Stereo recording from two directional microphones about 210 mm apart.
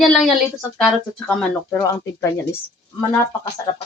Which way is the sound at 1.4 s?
10° left (ahead or behind).